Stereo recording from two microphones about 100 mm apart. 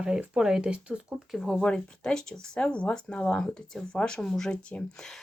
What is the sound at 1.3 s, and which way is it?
Speech, 5° left (ahead or behind).